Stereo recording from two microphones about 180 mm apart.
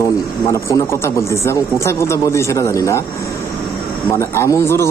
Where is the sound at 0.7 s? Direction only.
15° left (ahead or behind).